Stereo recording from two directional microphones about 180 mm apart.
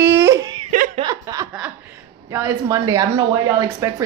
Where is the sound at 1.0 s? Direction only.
20° right (ahead or behind).